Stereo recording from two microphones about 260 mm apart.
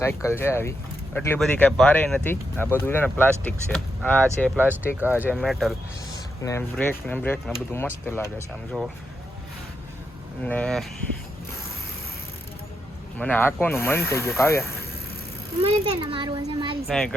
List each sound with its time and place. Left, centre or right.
0.0 s speech: centre
4.5 s speech: centre
6.1 s speech: centre
10.4 s speech: centre
13.1 s speech: centre
15.6 s a child's voice: centre
16.9 s speech: centre